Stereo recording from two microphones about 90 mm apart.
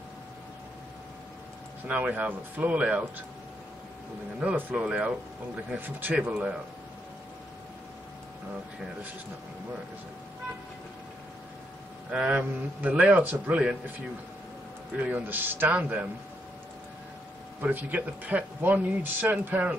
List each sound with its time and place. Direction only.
1.9 s a man's voice: 15° right (ahead or behind)
4.6 s a man's voice: 20° right (ahead or behind)
12.1 s a man's voice: 10° right (ahead or behind)
15.0 s speech: 20° right (ahead or behind)
17.6 s speech: 20° right (ahead or behind)